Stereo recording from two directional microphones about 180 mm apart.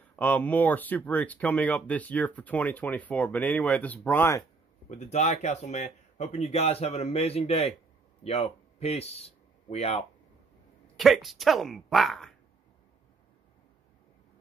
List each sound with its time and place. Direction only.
0.1 s speech: 10° left (ahead or behind)
4.8 s speech: 40° left (ahead or behind)
11.0 s speech: centre (ahead or behind)